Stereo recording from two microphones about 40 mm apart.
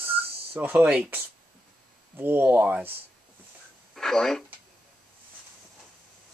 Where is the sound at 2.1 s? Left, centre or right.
Right.